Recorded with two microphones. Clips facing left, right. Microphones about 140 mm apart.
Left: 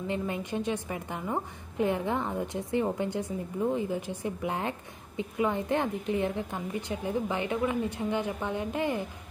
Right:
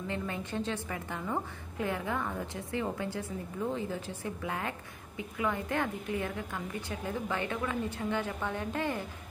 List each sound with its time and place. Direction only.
0.1 s a woman's voice: 15° left (ahead or behind)